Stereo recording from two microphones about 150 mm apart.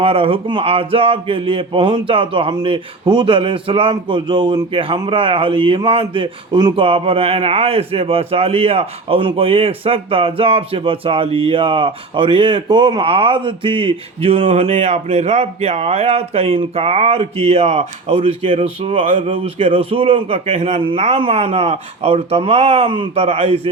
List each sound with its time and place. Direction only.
0.0 s speech: 40° right (ahead or behind)